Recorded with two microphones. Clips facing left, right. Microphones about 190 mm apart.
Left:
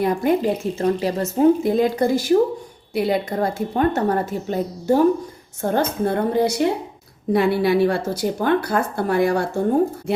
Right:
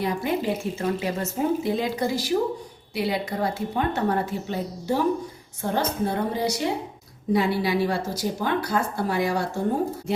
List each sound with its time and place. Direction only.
0.0 s speech: 50° left (ahead or behind)